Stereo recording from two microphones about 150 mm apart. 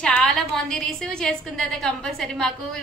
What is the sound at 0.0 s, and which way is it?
A woman's voice, 5° left (ahead or behind).